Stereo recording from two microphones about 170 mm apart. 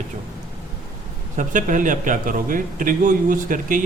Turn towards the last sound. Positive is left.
turn(degrees=-55)  # may be behind; listen again after turning